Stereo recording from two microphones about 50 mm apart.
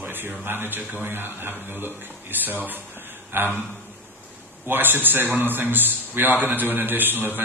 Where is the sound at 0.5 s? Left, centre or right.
Right.